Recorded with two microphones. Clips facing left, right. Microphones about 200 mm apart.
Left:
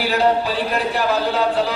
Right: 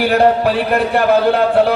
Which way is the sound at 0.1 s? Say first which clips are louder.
Right 3 dB; 60° right (ahead or behind).